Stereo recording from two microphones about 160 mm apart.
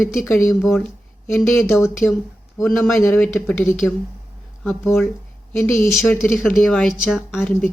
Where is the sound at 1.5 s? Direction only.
15° left (ahead or behind).